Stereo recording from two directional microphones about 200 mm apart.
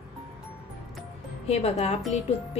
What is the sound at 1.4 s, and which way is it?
Speech, 30° left (ahead or behind).